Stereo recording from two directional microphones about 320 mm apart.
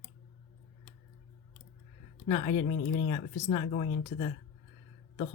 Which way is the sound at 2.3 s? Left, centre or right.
Centre.